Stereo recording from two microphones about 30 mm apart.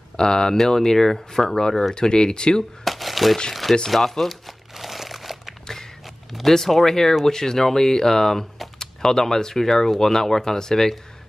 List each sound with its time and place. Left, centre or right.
0.2 s speech: left
0.7 s speech: centre
2.0 s speech: left
2.8 s a sound: centre
3.7 s speech: centre
4.2 s crumpling: centre
5.7 s a sound: centre
6.7 s speech: centre